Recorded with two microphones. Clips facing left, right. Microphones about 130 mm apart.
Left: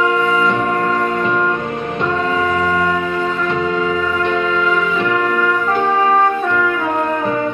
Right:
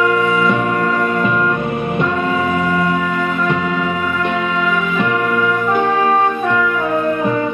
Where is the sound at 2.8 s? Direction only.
30° left (ahead or behind).